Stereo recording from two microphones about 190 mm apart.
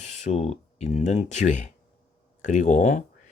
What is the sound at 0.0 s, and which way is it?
Speech, 35° left (ahead or behind).